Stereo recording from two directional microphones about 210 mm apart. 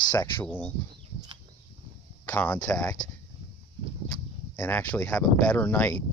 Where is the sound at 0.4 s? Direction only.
5° left (ahead or behind).